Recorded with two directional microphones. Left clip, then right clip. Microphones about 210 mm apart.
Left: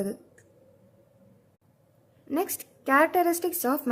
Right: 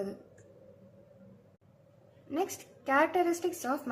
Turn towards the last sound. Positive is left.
turn(degrees=55)  # may be behind; listen again after turning